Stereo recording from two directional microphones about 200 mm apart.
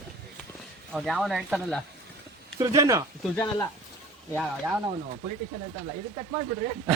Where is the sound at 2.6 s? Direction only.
15° right (ahead or behind).